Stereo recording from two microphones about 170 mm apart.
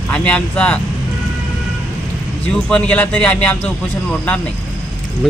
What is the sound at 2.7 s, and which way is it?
Speech, 10° left (ahead or behind).